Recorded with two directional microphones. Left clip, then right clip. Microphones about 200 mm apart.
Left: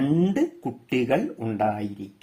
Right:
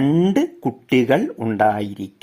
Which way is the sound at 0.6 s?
30° right (ahead or behind).